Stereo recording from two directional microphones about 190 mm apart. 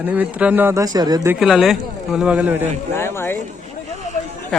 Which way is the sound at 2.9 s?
10° left (ahead or behind).